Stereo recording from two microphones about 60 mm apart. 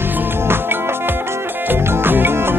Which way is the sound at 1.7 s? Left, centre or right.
Right.